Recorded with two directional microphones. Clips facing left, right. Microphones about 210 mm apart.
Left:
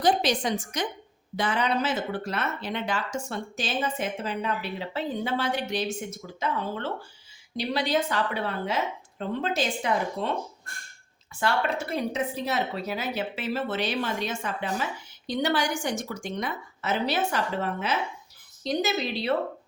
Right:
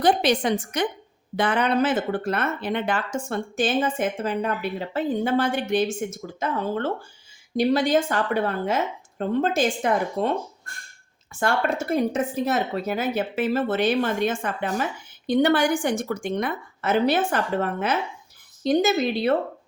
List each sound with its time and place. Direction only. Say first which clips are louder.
0.0 s a woman's voice: right 4 dB; 60° right (ahead or behind)
11.3 s speech: right 3 dB; 50° right (ahead or behind)